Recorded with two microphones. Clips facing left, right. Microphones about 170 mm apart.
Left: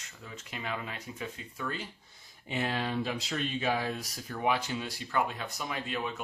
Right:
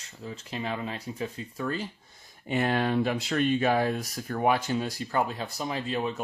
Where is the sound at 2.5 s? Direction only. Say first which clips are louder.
Right 7 dB; 55° right (ahead or behind).